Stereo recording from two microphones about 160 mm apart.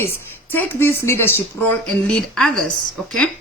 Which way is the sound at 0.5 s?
15° left (ahead or behind).